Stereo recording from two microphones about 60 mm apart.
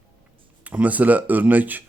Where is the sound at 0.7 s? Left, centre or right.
Right.